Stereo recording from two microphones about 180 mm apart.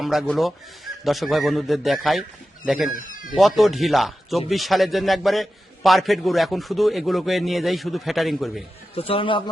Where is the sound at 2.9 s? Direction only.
50° left (ahead or behind).